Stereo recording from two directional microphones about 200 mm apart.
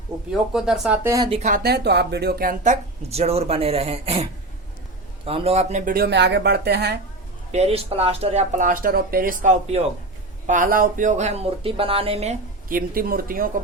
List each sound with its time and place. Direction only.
0.3 s speech: centre (ahead or behind)
1.0 s speech: 15° right (ahead or behind)
1.3 s speech: 35° right (ahead or behind)
3.1 s speech: 30° right (ahead or behind); by 7.0 s 55° right (ahead or behind)
7.5 s speech: 30° right (ahead or behind)